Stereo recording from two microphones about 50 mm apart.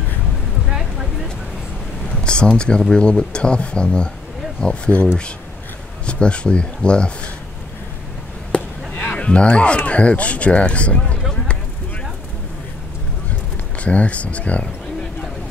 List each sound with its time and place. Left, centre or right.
0.7 s a sound: centre
2.2 s speech: centre
8.5 s chop: left
8.9 s a sound: left
9.8 s speech: left
13.8 s speech: left